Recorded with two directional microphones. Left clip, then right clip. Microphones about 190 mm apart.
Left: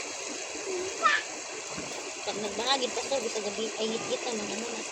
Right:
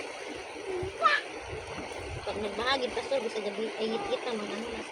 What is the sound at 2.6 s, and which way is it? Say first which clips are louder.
Speech: left 1 dB; 15° left (ahead or behind).